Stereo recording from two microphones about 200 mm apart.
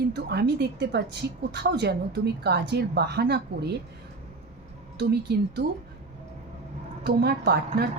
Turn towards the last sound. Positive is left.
turn(degrees=-55)  # may be behind; listen again after turning